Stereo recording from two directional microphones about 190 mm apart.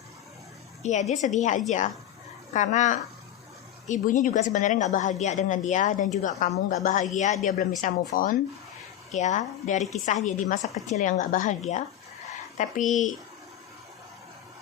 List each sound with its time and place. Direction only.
0.8 s a woman's voice: 35° left (ahead or behind)
12.5 s a woman's voice: 40° left (ahead or behind)